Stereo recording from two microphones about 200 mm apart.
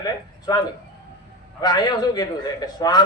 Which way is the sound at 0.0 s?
20° left (ahead or behind).